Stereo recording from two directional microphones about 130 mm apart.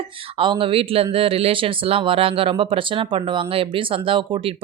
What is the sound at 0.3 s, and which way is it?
Speech, 40° right (ahead or behind).